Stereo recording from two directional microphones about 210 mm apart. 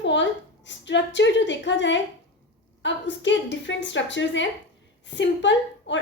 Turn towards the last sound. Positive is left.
turn(degrees=60)  # may be behind; listen again after turning